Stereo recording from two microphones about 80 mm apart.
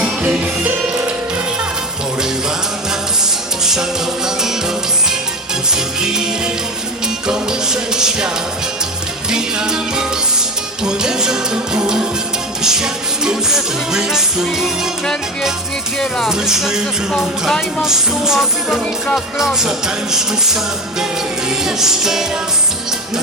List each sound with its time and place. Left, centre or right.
0.0 s music: centre
3.6 s music: centre
5.7 s music: centre
9.3 s music: centre
15.0 s music: centre
16.3 s music: centre
17.8 s music: centre
21.6 s music: centre